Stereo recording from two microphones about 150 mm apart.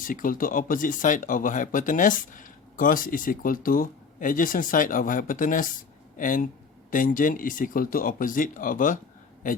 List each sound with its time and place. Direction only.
0.0 s speech: 65° left (ahead or behind)